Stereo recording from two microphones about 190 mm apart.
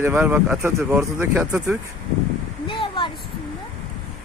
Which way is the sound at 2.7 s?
25° left (ahead or behind).